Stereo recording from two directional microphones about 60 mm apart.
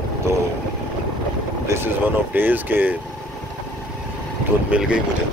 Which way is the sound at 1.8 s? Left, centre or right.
Right.